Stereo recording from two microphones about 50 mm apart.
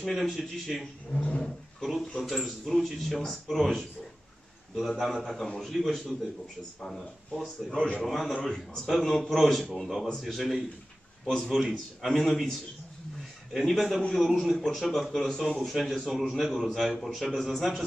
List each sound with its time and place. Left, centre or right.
0.0 s speech: centre
1.1 s a sound: centre
1.4 s speech: centre
7.7 s a man's voice: centre
8.4 s speech: centre
11.2 s a man's voice: centre